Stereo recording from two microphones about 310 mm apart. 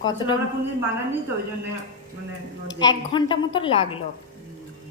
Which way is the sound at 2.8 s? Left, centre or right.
Centre.